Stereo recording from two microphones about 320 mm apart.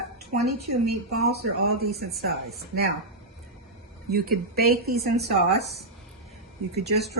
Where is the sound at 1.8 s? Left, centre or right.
Right.